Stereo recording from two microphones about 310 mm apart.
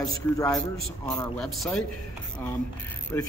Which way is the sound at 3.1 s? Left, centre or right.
Centre.